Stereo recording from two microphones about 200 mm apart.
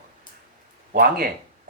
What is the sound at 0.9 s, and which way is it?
Speech, 45° right (ahead or behind).